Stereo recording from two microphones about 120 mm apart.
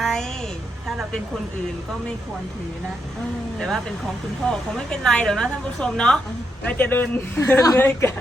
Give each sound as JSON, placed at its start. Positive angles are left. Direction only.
{"t": 0.0, "sound": "a sound", "side_deg": 5}
{"t": 0.9, "sound": "speech", "side_deg": 0}
{"t": 4.4, "sound": "a woman's voice", "side_deg": 5}